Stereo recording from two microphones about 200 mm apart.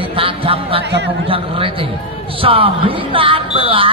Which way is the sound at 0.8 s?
55° right (ahead or behind).